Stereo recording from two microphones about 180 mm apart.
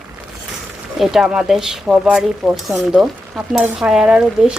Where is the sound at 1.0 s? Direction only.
Centre (ahead or behind).